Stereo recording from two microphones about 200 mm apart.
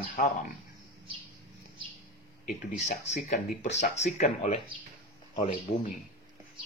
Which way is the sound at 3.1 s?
35° left (ahead or behind).